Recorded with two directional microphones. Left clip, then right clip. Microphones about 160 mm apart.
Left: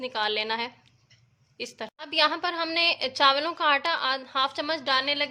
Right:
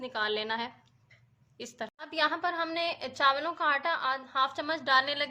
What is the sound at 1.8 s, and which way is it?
A woman's voice, 20° left (ahead or behind).